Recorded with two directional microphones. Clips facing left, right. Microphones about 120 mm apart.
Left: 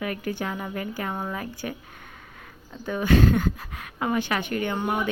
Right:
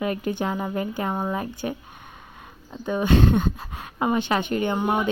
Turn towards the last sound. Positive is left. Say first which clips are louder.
# right 3 dB
turn(degrees=-25)  # may be behind; listen again after turning